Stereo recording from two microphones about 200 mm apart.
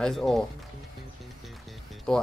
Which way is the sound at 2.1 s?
5° left (ahead or behind).